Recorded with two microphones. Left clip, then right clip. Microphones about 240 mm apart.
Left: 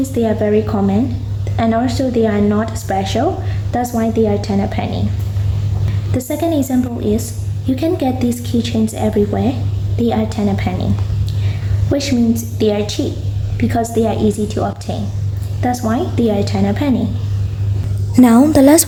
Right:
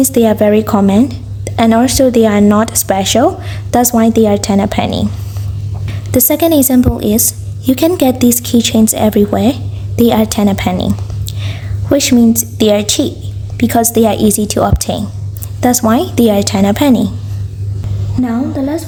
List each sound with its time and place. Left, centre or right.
0.0 s a woman's voice: right
6.1 s a woman's voice: right
11.3 s a sound: right
13.6 s a woman's voice: right
18.2 s a woman's voice: left